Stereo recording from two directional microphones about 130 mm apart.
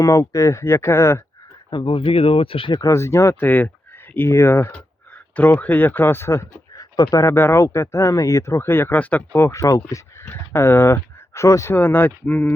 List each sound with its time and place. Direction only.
0.0 s speech: 25° left (ahead or behind)
1.7 s speech: 40° left (ahead or behind); by 12.5 s 10° left (ahead or behind)